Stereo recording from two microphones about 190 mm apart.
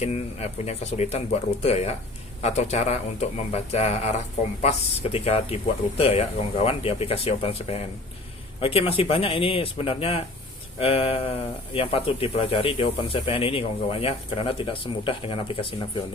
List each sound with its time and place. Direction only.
0.0 s speech: 35° left (ahead or behind)